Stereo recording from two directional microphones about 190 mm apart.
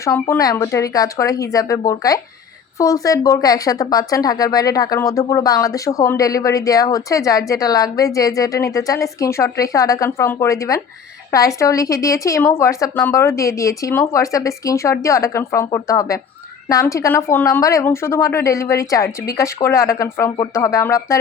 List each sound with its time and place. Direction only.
0.0 s speech: 15° left (ahead or behind)